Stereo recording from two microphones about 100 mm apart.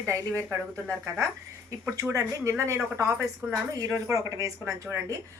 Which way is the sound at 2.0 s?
30° right (ahead or behind).